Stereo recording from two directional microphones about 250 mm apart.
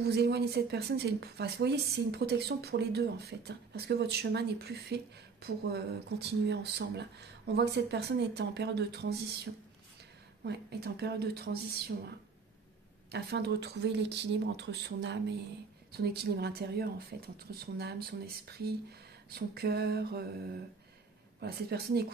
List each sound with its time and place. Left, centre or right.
0.0 s speech: right
10.4 s speech: right
13.1 s speech: right
18.9 s a sound: right
21.4 s speech: right